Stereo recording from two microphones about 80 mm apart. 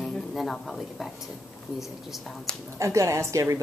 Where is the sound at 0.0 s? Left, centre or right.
Centre.